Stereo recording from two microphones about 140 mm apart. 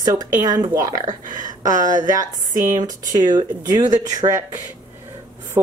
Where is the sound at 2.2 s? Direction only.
25° right (ahead or behind).